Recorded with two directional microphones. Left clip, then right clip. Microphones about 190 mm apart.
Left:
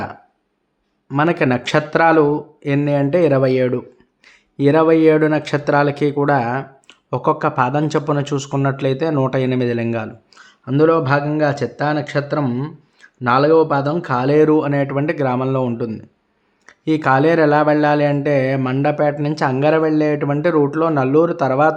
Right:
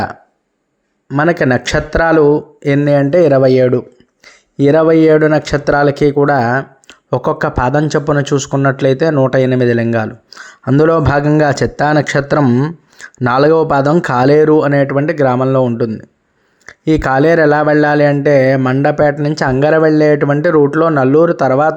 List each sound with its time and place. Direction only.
1.1 s a man's voice: 25° right (ahead or behind)
16.6 s speech: 25° right (ahead or behind)